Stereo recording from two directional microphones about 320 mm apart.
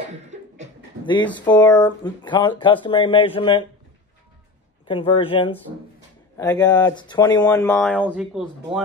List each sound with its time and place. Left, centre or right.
0.0 s beatboxing: right
1.0 s speech: centre
4.8 s speech: centre